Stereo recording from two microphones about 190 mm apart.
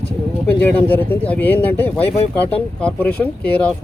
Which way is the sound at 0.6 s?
10° left (ahead or behind).